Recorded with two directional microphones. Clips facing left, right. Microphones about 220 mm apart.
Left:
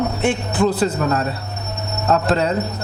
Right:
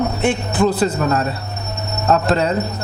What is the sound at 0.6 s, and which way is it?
Speech, 10° right (ahead or behind).